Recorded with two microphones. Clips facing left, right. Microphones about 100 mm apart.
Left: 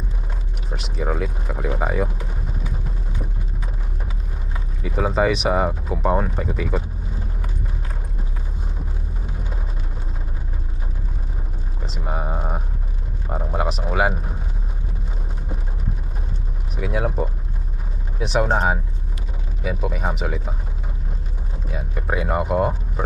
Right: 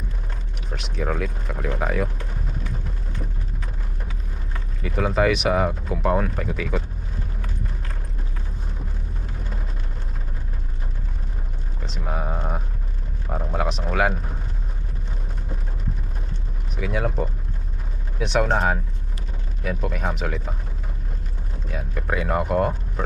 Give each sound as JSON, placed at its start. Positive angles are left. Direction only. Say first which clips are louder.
{"t": 0.8, "sound": "speech", "louder": "left 1 dB", "side_deg": 5}
{"t": 4.5, "sound": "speech", "louder": "left 1 dB", "side_deg": 5}
{"t": 11.9, "sound": "speech", "louder": "left 1 dB", "side_deg": 5}
{"t": 16.7, "sound": "speech", "louder": "left 1 dB", "side_deg": 5}
{"t": 21.7, "sound": "speech", "louder": "left 1 dB", "side_deg": 5}